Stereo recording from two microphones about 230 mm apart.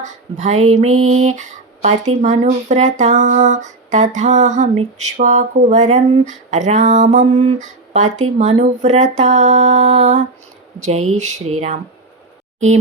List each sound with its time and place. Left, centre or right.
0.0 s speech: right
0.9 s a sound: right
1.2 s speech: right
10.9 s speech: right
11.2 s speech: right
12.5 s speech: right